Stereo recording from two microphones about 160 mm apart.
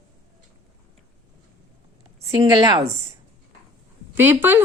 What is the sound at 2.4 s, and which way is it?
Speech, 25° right (ahead or behind).